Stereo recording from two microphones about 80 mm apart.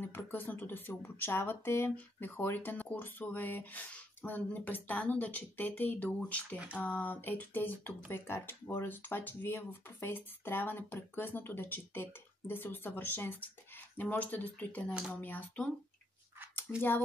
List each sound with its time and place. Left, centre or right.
0.0 s speech: left